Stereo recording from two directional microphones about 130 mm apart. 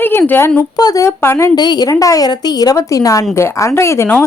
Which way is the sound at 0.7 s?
30° left (ahead or behind).